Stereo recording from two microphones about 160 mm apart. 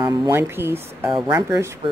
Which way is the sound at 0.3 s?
15° right (ahead or behind).